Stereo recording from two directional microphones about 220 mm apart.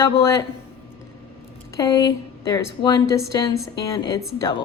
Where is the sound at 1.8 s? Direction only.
15° left (ahead or behind).